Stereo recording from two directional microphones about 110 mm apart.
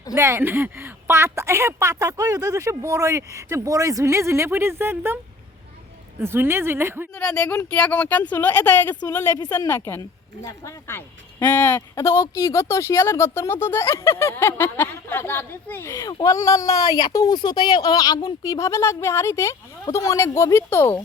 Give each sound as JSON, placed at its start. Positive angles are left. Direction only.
{"t": 0.2, "sound": "a woman's voice", "side_deg": -25}
{"t": 7.1, "sound": "speech", "side_deg": 10}
{"t": 9.2, "sound": "a woman's voice", "side_deg": 30}